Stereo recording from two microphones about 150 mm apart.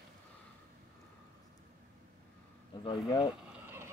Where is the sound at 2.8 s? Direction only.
35° left (ahead or behind).